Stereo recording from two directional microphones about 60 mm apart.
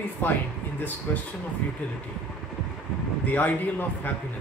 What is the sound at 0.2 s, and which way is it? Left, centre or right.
Speech, left.